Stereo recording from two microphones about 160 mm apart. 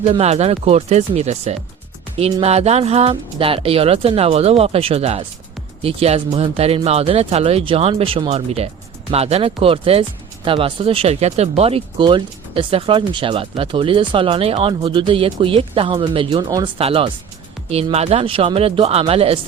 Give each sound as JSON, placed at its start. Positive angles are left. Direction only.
{"t": 0.0, "sound": "speech", "side_deg": -40}
{"t": 16.7, "sound": "speech", "side_deg": -35}